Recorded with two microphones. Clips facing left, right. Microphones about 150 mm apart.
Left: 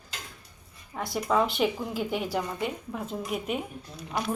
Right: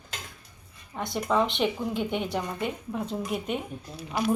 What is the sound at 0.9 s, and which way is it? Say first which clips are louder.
A woman's voice: even; centre (ahead or behind).